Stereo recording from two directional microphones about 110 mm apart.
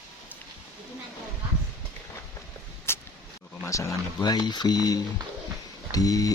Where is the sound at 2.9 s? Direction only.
20° left (ahead or behind).